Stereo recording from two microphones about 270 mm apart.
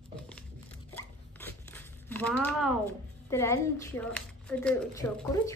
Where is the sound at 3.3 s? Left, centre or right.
Centre.